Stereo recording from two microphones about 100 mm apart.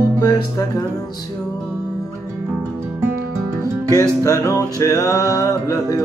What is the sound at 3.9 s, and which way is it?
Music, 35° left (ahead or behind).